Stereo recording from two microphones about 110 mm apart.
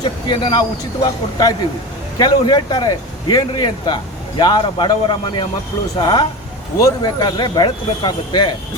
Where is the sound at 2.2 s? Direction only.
40° left (ahead or behind).